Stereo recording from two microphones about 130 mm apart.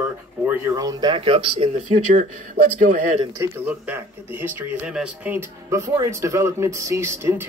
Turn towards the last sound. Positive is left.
turn(degrees=-20)  # may be behind; listen again after turning